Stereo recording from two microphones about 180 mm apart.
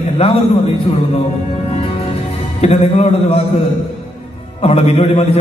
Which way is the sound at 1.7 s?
35° left (ahead or behind).